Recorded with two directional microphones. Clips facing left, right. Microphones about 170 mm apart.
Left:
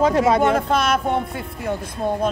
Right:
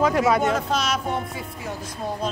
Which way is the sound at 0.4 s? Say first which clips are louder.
Left 5 dB; 55° left (ahead or behind).